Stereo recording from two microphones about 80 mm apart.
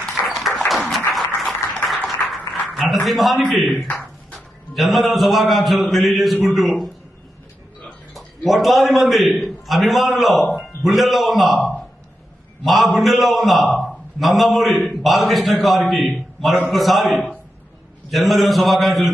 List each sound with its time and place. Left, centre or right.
0.3 s a sound: centre
0.7 s applause: centre
2.2 s music: left
2.7 s a man's voice: centre
3.8 s a sound: centre
4.7 s a man's voice: centre
8.1 s a man's voice: centre
13.7 s a sound: centre
15.0 s a man's voice: centre